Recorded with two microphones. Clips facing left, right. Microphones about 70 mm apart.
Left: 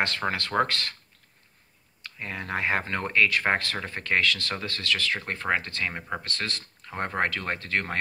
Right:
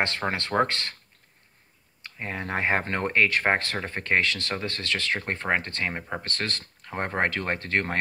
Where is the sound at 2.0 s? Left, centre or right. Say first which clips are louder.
Right 2 dB; right.